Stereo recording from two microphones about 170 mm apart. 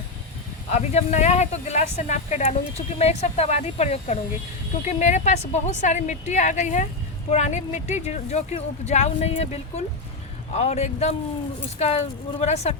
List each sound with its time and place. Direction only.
0.7 s a woman's voice: 40° left (ahead or behind)
12.4 s speech: 40° left (ahead or behind)